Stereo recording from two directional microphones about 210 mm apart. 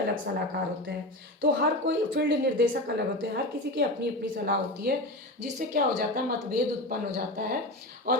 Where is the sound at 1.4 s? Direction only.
60° right (ahead or behind).